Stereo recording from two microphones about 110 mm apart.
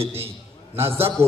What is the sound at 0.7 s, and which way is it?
Speech, 20° right (ahead or behind).